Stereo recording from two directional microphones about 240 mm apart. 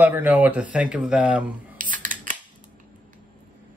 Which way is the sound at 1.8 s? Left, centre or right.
Right.